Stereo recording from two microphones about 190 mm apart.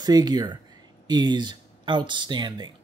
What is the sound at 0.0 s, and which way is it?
Speech, 20° right (ahead or behind).